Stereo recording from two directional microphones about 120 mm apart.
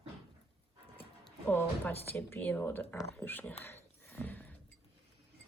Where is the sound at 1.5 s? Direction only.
15° left (ahead or behind).